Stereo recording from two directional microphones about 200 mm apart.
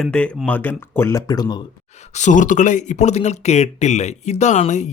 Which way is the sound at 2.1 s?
40° left (ahead or behind).